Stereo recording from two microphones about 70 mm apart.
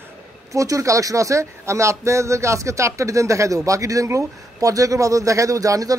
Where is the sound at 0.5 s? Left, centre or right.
Right.